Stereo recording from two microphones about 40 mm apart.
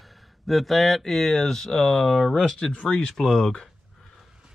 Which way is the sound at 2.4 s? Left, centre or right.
Centre.